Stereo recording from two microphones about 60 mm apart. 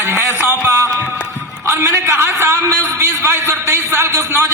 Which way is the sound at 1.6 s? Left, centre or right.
Right.